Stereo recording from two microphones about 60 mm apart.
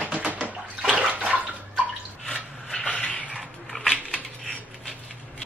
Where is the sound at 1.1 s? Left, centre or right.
Right.